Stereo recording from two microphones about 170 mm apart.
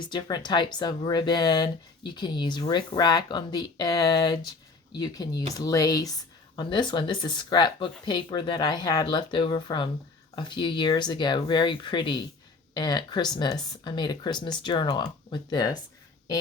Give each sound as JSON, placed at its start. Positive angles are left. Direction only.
{"t": 0.0, "sound": "speech", "side_deg": 25}